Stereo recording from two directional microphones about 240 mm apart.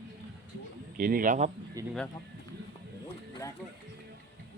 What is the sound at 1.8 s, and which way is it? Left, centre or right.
Speech, centre.